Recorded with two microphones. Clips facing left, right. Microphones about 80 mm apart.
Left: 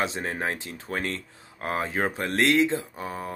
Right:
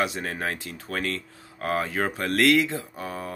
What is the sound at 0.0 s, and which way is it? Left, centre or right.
Speech, left.